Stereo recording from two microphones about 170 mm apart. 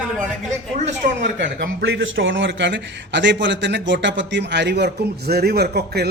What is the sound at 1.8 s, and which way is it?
A man's voice, 90° right.